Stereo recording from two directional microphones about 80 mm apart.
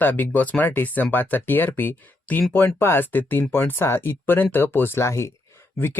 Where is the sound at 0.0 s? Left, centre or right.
Left.